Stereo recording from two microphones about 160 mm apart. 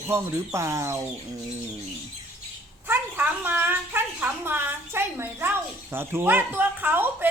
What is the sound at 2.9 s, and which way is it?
A woman's voice, 10° right (ahead or behind).